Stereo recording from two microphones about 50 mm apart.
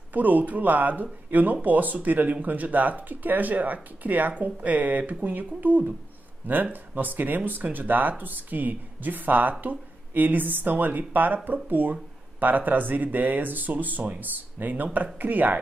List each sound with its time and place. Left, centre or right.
0.1 s speech: right